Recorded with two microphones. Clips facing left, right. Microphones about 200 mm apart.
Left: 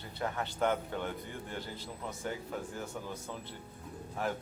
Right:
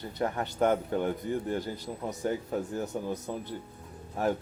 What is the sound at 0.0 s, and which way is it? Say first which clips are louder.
Speech: right 5 dB; 40° right (ahead or behind).